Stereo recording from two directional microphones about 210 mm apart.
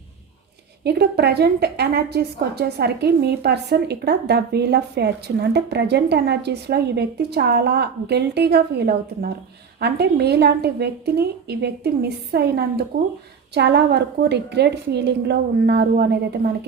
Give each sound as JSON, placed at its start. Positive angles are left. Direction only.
{"t": 0.9, "sound": "a woman's voice", "side_deg": -50}